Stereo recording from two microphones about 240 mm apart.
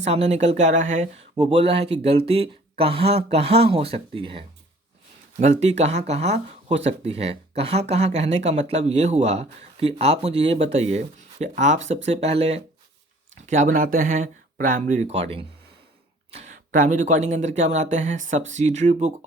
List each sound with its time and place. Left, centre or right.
0.0 s speech: right